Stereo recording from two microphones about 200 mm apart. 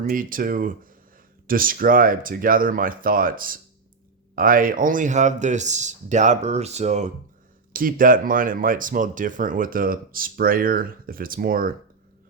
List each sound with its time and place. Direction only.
0.0 s speech: 45° right (ahead or behind)
7.7 s speech: 45° right (ahead or behind)